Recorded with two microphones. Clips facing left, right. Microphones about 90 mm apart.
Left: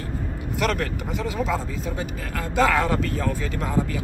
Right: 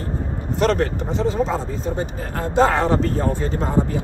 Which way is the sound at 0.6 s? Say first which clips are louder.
Right 6 dB; 35° right (ahead or behind).